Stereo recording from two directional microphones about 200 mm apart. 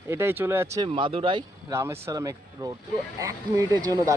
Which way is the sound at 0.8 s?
25° right (ahead or behind).